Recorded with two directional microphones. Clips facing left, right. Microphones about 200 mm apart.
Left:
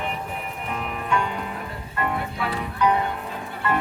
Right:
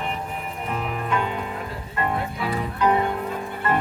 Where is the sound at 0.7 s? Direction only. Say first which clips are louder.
Right 3 dB; centre (ahead or behind).